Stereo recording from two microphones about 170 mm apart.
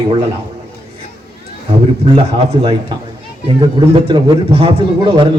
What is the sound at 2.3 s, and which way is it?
A man's voice, 30° right (ahead or behind).